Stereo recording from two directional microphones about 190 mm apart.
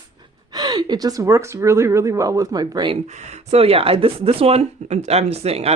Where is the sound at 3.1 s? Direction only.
35° right (ahead or behind).